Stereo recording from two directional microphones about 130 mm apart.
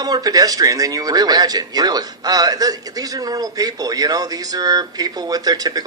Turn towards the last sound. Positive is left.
turn(degrees=-30)  # may be behind; listen again after turning